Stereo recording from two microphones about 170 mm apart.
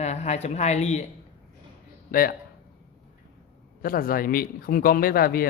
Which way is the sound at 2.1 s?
60° left (ahead or behind).